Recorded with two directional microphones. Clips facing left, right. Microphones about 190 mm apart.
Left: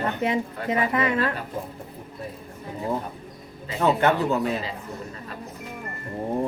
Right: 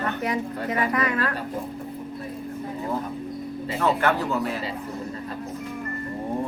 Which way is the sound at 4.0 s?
20° left (ahead or behind).